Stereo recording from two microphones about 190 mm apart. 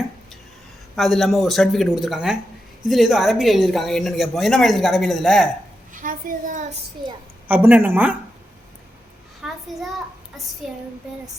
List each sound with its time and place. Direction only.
0.9 s speech: centre (ahead or behind)
5.9 s a child's voice: 45° right (ahead or behind)
7.4 s speech: 10° right (ahead or behind)
9.4 s speech: centre (ahead or behind)
10.6 s speech: centre (ahead or behind)